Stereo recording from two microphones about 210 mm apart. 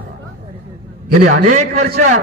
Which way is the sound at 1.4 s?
35° right (ahead or behind).